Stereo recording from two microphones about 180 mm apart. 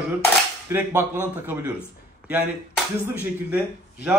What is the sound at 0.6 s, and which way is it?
Speech, 10° right (ahead or behind).